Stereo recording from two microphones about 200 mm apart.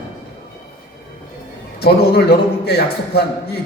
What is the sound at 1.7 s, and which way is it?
A man's voice, 50° left (ahead or behind).